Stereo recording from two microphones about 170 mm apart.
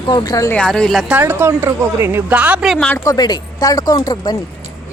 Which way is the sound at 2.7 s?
10° left (ahead or behind).